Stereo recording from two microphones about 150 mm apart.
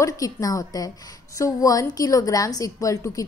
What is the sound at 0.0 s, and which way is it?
A woman's voice, 25° left (ahead or behind).